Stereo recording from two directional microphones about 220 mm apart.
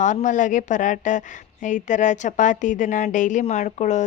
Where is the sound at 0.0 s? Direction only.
35° left (ahead or behind).